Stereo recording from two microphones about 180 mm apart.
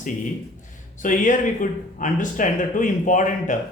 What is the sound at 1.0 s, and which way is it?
Speech, 45° left (ahead or behind).